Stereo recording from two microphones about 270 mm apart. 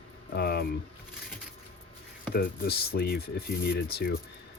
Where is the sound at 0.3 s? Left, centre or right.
Left.